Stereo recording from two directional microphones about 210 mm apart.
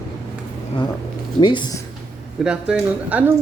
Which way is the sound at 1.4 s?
20° left (ahead or behind).